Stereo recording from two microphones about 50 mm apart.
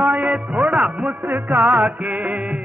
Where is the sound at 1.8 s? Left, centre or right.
Right.